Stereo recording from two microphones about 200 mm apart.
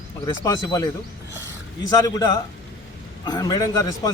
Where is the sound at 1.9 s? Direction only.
20° left (ahead or behind).